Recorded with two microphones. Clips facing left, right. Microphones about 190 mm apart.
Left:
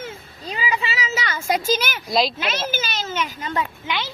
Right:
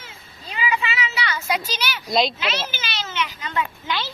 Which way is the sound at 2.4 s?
50° left (ahead or behind).